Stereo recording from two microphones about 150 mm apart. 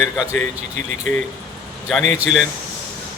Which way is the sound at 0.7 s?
55° right (ahead or behind).